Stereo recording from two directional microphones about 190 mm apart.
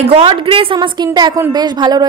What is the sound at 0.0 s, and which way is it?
A woman's voice, 30° right (ahead or behind).